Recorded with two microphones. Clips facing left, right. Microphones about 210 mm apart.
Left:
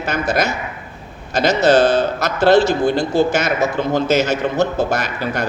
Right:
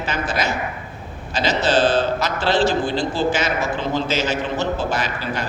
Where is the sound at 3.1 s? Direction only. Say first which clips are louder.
Left 5 dB; 60° left (ahead or behind).